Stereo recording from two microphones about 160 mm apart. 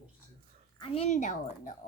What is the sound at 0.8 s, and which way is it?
Speech, 40° left (ahead or behind).